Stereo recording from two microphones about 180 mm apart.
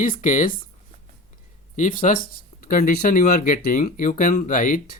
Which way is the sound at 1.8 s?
45° left (ahead or behind).